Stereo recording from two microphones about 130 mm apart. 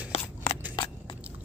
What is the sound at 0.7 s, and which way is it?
Biting, 40° left (ahead or behind).